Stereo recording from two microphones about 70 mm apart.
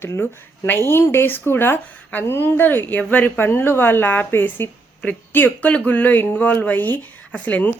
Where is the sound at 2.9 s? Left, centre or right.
Left.